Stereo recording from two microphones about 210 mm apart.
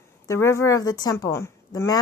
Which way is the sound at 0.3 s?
15° left (ahead or behind).